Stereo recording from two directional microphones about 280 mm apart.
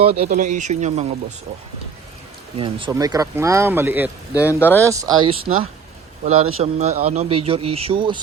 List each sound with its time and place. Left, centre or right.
0.0 s a man's voice: right
2.6 s speech: centre
4.4 s speech: centre
4.8 s a man's voice: centre